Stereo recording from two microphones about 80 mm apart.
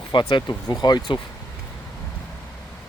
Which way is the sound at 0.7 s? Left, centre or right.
Left.